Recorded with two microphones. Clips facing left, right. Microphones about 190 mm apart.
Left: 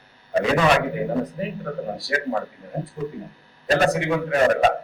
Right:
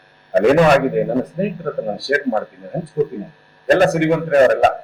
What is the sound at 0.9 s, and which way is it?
A man's voice, 60° right (ahead or behind).